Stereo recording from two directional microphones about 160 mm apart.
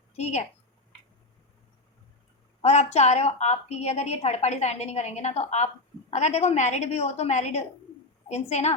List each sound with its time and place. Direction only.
0.1 s a woman's voice: 45° left (ahead or behind)
2.6 s a woman's voice: 40° left (ahead or behind)